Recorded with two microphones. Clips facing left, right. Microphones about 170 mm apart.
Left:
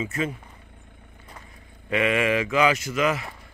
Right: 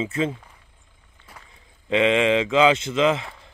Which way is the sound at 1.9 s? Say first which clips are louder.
Right 4 dB; 20° right (ahead or behind).